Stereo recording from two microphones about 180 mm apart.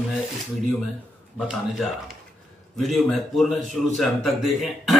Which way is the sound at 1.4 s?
Centre (ahead or behind).